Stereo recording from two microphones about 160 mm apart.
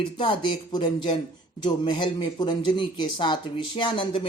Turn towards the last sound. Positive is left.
turn(degrees=30)  # may be behind; listen again after turning